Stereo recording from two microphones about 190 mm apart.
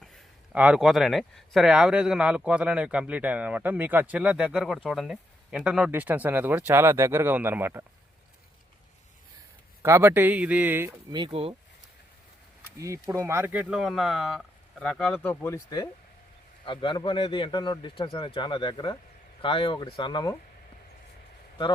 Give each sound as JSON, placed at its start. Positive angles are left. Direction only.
{"t": 0.5, "sound": "speech", "side_deg": -5}
{"t": 9.8, "sound": "speech", "side_deg": -10}
{"t": 11.1, "sound": "speech", "side_deg": -25}
{"t": 12.8, "sound": "speech", "side_deg": -15}